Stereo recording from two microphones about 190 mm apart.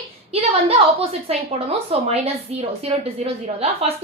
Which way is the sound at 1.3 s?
30° right (ahead or behind).